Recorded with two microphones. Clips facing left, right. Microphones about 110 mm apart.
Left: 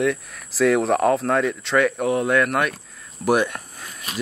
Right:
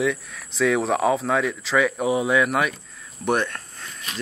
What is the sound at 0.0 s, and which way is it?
Speech, centre (ahead or behind).